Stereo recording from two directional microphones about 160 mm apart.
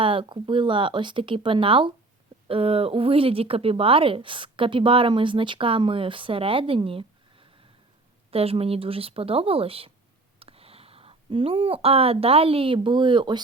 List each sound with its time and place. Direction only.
0.0 s speech: 35° right (ahead or behind)